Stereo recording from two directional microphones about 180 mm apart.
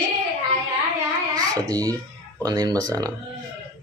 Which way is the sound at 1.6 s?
20° right (ahead or behind).